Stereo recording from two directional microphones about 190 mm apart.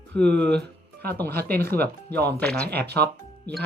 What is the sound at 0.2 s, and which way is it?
Speech, 5° left (ahead or behind).